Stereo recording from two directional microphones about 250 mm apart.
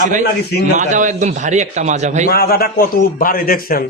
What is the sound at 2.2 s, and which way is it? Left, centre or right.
A man's voice, left.